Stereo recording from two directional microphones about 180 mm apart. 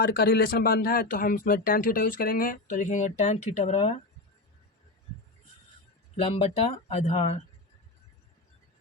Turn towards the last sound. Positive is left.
turn(degrees=35)  # may be behind; listen again after turning